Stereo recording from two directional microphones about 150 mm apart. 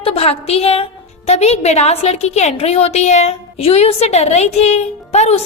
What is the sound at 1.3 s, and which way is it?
A woman's voice, 45° left (ahead or behind).